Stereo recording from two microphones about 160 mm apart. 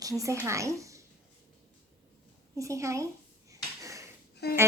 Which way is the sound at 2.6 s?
20° right (ahead or behind).